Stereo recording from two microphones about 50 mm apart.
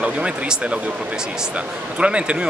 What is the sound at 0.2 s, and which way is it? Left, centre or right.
Speech, centre.